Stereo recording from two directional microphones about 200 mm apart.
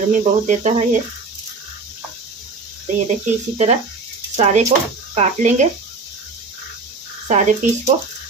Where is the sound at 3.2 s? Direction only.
35° right (ahead or behind).